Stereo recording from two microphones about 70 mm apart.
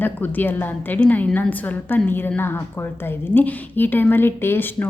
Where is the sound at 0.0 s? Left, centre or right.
Left.